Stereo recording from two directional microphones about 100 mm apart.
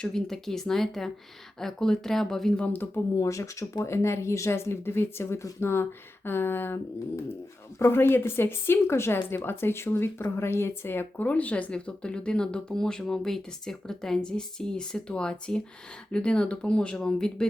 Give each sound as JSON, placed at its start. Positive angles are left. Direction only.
{"t": 0.0, "sound": "speech", "side_deg": 5}
{"t": 2.7, "sound": "speech", "side_deg": 25}
{"t": 7.8, "sound": "speech", "side_deg": 25}